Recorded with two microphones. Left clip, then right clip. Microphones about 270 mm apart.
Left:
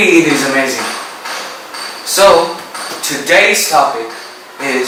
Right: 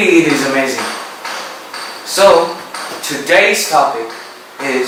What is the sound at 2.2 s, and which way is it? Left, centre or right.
Speech, centre.